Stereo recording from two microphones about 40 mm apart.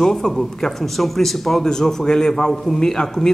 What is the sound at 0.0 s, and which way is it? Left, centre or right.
A man's voice, centre.